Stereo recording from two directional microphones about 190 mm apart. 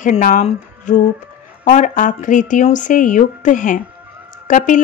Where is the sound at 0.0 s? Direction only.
45° left (ahead or behind).